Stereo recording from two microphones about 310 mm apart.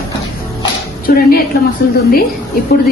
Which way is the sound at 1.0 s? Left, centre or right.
Left.